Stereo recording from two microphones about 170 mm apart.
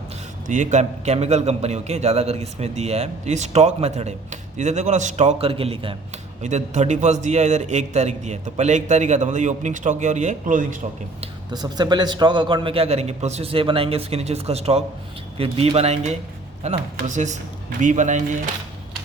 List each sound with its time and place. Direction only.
0.4 s a man's voice: 50° right (ahead or behind); by 6.0 s 30° right (ahead or behind)
6.4 s a man's voice: 45° right (ahead or behind)
11.5 s a man's voice: 25° right (ahead or behind); by 18.2 s 45° right (ahead or behind)